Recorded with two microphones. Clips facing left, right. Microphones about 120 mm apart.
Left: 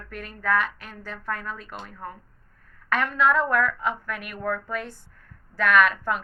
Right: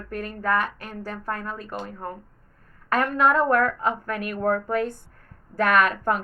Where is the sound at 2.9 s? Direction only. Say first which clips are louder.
Right 2 dB; 45° right (ahead or behind).